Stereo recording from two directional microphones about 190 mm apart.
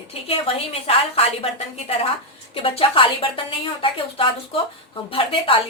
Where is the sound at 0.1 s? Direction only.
30° left (ahead or behind).